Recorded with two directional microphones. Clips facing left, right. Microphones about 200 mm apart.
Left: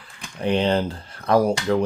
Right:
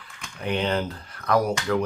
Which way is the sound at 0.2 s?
30° left (ahead or behind).